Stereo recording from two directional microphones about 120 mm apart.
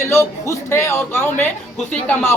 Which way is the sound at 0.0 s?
25° left (ahead or behind).